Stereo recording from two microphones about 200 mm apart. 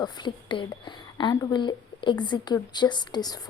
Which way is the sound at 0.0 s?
20° left (ahead or behind).